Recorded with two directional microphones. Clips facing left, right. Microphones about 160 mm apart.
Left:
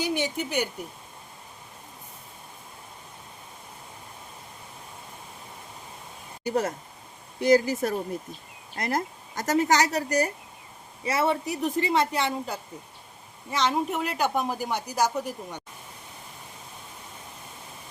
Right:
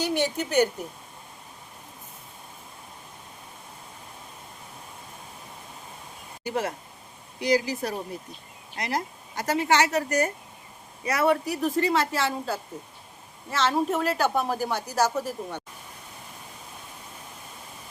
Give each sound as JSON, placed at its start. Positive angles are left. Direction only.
{"t": 0.0, "sound": "a woman's voice", "side_deg": 10}
{"t": 6.4, "sound": "a woman's voice", "side_deg": 40}